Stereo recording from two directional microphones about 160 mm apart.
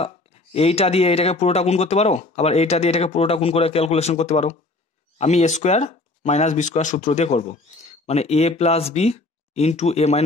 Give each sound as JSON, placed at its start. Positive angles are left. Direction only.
{"t": 0.0, "sound": "speech", "side_deg": 40}